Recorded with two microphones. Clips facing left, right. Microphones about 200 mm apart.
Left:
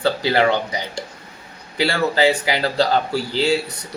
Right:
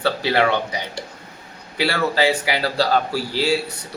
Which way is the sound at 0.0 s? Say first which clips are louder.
Left 1 dB; 15° left (ahead or behind).